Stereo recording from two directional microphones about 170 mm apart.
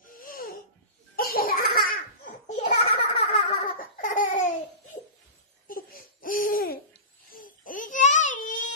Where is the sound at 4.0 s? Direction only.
50° left (ahead or behind).